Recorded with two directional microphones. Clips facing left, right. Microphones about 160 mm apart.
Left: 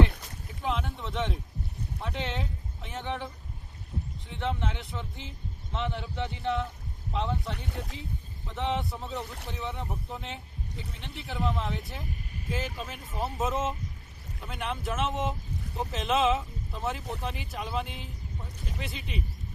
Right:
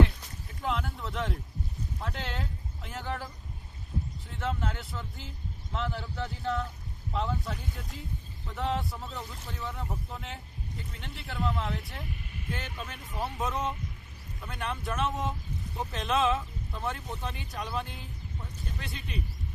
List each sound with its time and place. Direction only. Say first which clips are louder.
0.6 s a sound: left 1 dB; centre (ahead or behind)
2.0 s speech: left 4 dB; centre (ahead or behind)
3.9 s boat: right 2 dB; centre (ahead or behind)
4.3 s speech: left 2 dB; centre (ahead or behind)
7.1 s speech: left 1 dB; centre (ahead or behind)
7.5 s speech: left 2 dB; 70° left (ahead or behind)
8.4 s speech: left 1 dB; centre (ahead or behind)